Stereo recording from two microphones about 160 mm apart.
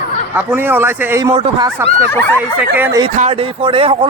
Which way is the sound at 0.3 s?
10° right (ahead or behind).